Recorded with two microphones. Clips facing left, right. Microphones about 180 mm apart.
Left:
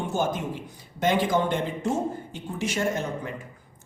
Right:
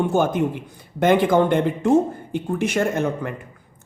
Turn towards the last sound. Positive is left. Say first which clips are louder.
# right 6 dB
turn(degrees=-60)  # may be behind; listen again after turning